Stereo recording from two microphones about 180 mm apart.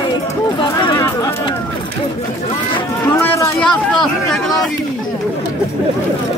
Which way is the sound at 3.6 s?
Centre (ahead or behind).